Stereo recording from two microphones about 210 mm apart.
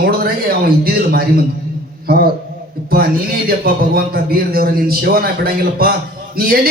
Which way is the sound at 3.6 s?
45° right (ahead or behind).